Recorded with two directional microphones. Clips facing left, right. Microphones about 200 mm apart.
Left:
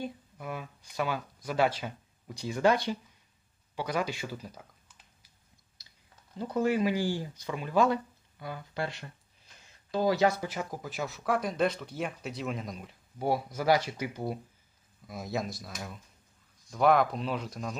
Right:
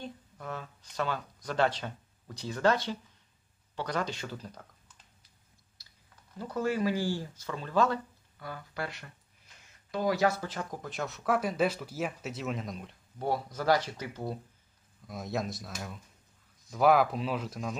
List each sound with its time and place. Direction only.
0.0 s speech: 10° left (ahead or behind)
5.8 s typing: 20° left (ahead or behind)
6.3 s speech: 20° left (ahead or behind)
10.2 s speech: 15° left (ahead or behind)
15.0 s speech: centre (ahead or behind)